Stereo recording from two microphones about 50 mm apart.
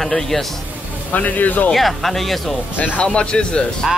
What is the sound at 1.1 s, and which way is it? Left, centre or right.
Speech, left.